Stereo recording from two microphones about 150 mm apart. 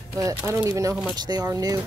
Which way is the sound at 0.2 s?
15° right (ahead or behind).